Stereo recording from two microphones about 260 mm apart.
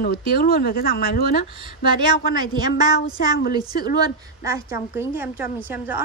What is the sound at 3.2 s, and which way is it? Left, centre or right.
Speech, left.